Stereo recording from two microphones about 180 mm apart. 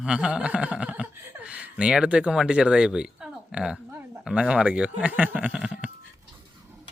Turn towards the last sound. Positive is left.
turn(degrees=-5)  # may be behind; listen again after turning